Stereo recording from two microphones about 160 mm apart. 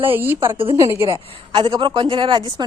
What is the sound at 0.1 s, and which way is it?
Speech, 10° right (ahead or behind).